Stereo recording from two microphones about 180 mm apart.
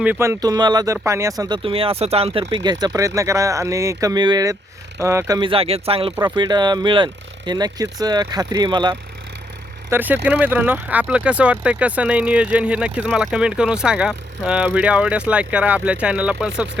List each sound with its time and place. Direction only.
0.0 s speech: 10° right (ahead or behind); by 2.4 s 35° right (ahead or behind)
2.4 s speech: 25° right (ahead or behind)
9.9 s speech: 10° right (ahead or behind)